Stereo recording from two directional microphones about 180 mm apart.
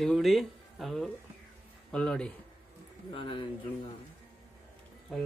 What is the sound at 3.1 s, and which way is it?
Speech, 30° left (ahead or behind).